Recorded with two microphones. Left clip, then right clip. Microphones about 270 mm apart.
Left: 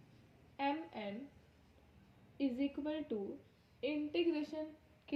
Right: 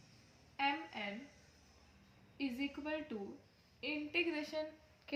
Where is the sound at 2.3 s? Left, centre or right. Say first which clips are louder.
Left 3 dB; right.